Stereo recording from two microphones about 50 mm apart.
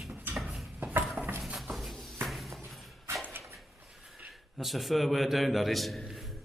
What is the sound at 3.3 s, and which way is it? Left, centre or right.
Dog, right.